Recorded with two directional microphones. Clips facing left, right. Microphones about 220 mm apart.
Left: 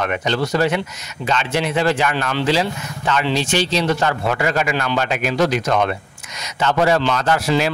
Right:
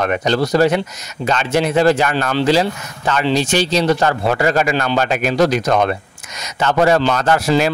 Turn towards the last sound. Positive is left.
turn(degrees=-45)  # may be behind; listen again after turning